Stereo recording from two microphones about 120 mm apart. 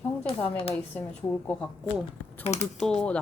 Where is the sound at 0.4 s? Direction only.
50° left (ahead or behind).